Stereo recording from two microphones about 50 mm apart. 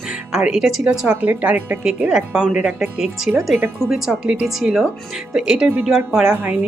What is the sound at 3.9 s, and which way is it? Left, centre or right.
Speech, centre.